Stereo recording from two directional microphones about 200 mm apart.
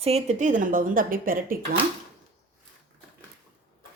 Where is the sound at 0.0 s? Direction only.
30° right (ahead or behind).